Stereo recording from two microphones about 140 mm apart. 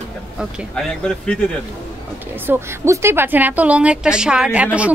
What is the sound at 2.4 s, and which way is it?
A woman's voice, 20° right (ahead or behind).